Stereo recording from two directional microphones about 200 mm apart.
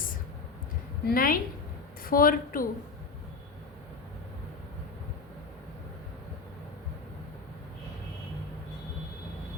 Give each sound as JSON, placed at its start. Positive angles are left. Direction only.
{"t": 1.0, "sound": "a woman's voice", "side_deg": 45}